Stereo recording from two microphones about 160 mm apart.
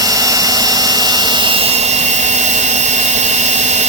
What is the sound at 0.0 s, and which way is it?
Jet engine, 20° right (ahead or behind).